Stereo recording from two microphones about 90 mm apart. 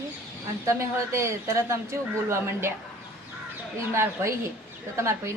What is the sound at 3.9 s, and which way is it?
Speech, 30° right (ahead or behind).